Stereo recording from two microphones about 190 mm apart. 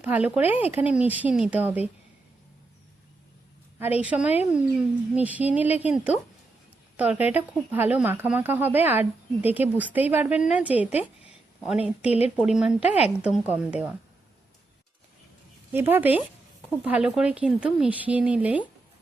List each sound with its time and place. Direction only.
0.0 s speech: 10° right (ahead or behind)
3.8 s speech: 10° right (ahead or behind)
12.4 s speech: 5° right (ahead or behind)
12.8 s a woman's voice: 35° left (ahead or behind)
13.5 s speech: 5° right (ahead or behind)
15.7 s speech: 10° right (ahead or behind)